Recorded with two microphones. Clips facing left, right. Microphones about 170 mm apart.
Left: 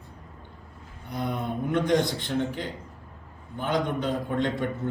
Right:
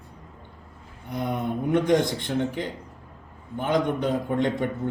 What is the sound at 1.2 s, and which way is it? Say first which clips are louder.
Speech: right 3 dB; 15° right (ahead or behind).